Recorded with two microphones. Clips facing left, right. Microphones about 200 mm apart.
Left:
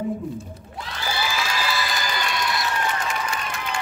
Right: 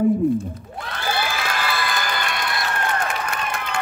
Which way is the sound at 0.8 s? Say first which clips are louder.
Right 3 dB; 55° right (ahead or behind).